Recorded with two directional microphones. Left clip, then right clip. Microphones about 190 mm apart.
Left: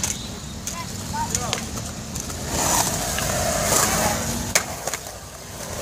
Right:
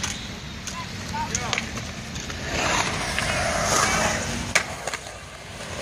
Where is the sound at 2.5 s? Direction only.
55° left (ahead or behind).